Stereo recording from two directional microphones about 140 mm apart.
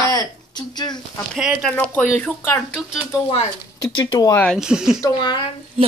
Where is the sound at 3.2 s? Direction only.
45° left (ahead or behind).